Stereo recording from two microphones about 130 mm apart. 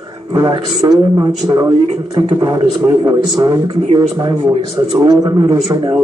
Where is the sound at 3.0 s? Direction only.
25° right (ahead or behind).